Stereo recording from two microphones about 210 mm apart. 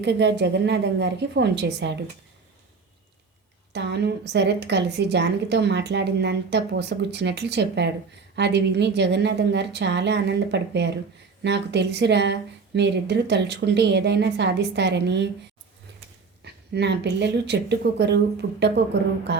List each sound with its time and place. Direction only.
0.0 s speech: 55° right (ahead or behind)
3.7 s a woman's voice: 55° right (ahead or behind)
16.4 s a woman's voice: 55° right (ahead or behind)